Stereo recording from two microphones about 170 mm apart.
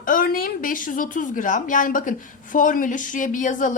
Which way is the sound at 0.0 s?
55° left (ahead or behind).